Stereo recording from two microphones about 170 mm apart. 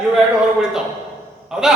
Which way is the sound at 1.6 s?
5° right (ahead or behind).